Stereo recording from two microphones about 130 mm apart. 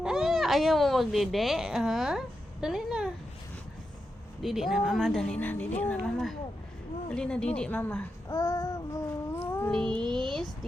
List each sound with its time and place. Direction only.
0.0 s speech: 5° right (ahead or behind)
4.4 s speech: centre (ahead or behind)
8.3 s child singing: 30° left (ahead or behind)
9.7 s speech: 5° left (ahead or behind)